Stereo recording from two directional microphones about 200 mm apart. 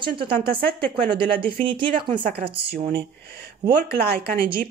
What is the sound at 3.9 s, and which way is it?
Speech, 50° right (ahead or behind).